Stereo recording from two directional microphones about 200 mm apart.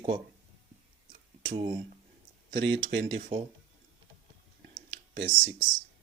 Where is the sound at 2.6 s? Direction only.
65° right (ahead or behind).